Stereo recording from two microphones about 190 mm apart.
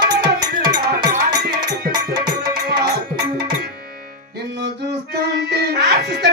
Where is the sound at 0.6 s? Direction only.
20° right (ahead or behind).